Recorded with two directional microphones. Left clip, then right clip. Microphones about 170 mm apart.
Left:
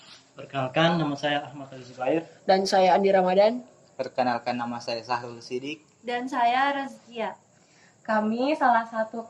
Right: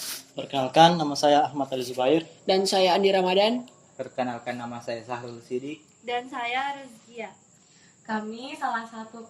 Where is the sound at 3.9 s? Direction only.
15° left (ahead or behind).